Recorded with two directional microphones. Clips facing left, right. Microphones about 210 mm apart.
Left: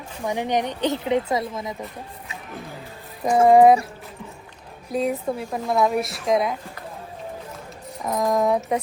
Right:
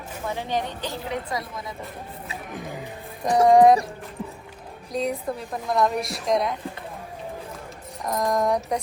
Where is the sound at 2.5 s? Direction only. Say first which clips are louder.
Right 2 dB; 15° right (ahead or behind).